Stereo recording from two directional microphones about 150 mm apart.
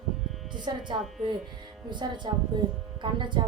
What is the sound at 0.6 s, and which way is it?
Speech, 30° right (ahead or behind).